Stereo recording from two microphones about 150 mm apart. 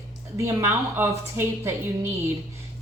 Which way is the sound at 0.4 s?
15° right (ahead or behind).